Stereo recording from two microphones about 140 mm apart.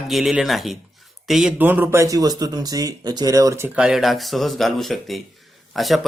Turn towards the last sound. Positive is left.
turn(degrees=0)  # may be behind; listen again after turning